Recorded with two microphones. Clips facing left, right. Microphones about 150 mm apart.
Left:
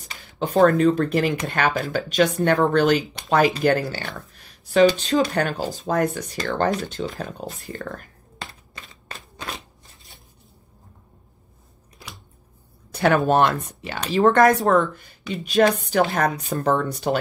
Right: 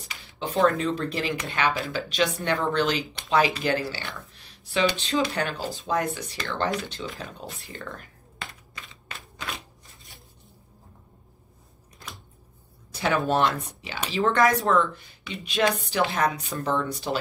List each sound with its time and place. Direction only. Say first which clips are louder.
0.0 s speech: left 5 dB; 45° left (ahead or behind)
8.7 s typewriter: left 4 dB; 45° left (ahead or behind)
12.9 s a sound: left 6 dB; 55° left (ahead or behind)
13.3 s speech: left 5 dB; 55° left (ahead or behind)